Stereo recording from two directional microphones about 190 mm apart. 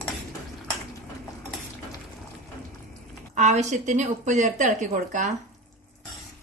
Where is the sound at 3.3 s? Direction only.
40° right (ahead or behind).